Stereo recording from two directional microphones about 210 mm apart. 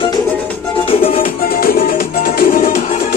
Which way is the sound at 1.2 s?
45° left (ahead or behind).